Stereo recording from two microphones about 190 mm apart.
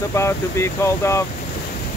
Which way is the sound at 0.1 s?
15° left (ahead or behind).